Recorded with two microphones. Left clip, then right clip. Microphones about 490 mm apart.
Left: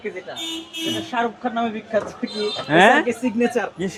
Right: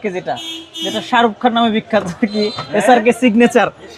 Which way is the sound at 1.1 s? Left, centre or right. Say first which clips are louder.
Right 14 dB; right.